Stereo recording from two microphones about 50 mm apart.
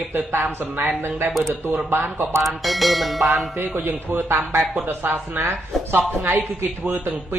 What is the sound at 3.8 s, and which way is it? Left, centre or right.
A woman's voice, right.